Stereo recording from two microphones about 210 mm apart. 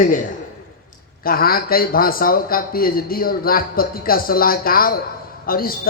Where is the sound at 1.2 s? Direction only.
45° left (ahead or behind).